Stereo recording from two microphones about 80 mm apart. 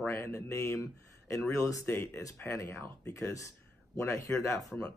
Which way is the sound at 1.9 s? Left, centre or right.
Left.